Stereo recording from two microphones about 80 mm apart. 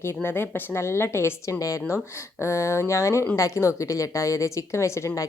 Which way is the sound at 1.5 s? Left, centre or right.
Left.